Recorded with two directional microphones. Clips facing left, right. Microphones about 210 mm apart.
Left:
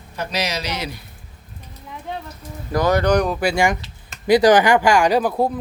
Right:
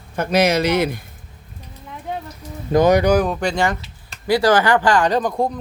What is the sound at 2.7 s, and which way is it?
Speech, 20° right (ahead or behind).